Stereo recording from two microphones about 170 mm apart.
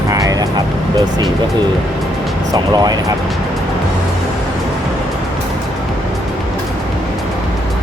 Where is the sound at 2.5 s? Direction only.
25° right (ahead or behind).